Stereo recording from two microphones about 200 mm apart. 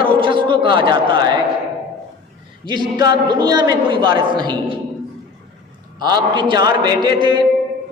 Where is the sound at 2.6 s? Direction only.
25° right (ahead or behind).